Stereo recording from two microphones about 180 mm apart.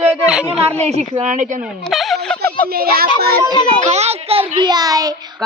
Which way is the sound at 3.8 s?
35° right (ahead or behind).